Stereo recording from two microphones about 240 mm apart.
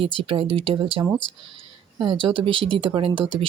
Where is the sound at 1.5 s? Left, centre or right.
Right.